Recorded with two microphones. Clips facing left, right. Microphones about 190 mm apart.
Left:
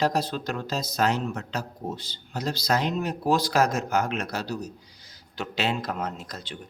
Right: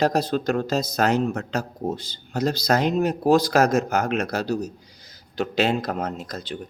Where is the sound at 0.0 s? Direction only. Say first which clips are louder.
Right 5 dB; 45° right (ahead or behind).